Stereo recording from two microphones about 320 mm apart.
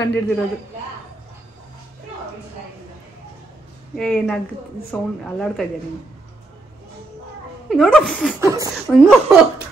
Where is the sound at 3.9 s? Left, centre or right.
Centre.